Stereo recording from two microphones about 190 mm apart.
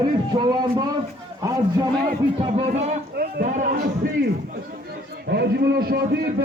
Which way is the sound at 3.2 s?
50° right (ahead or behind).